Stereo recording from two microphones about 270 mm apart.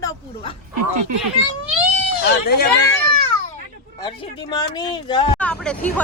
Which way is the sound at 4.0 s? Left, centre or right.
Centre.